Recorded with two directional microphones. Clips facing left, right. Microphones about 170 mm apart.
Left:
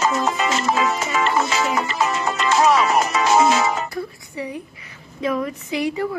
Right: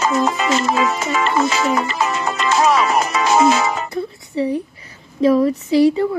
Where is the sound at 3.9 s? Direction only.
25° right (ahead or behind).